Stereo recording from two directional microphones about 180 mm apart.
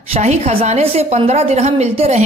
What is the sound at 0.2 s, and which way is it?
A woman's voice, 35° right (ahead or behind).